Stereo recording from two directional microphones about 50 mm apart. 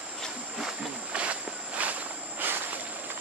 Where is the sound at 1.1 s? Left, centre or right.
Right.